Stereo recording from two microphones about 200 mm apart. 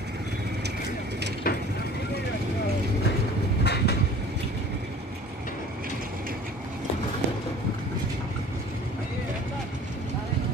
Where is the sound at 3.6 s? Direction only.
55° left (ahead or behind).